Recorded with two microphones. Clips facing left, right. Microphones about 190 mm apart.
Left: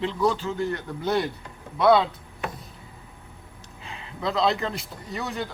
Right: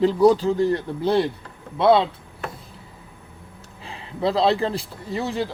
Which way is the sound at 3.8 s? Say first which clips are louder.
Right 7 dB; 35° right (ahead or behind).